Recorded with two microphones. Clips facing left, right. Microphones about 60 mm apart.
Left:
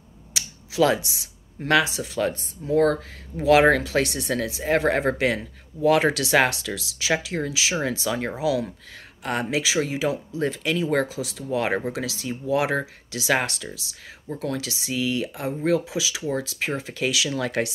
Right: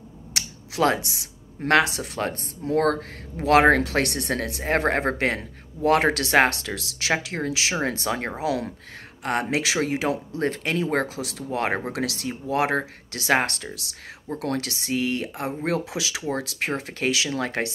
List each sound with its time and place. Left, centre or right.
0.3 s a sound: right
1.7 s speech: right
2.6 s speech: right
11.9 s speech: right
12.3 s speech: right
13.7 s speech: right